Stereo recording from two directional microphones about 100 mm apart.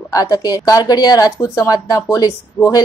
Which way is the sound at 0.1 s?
40° left (ahead or behind).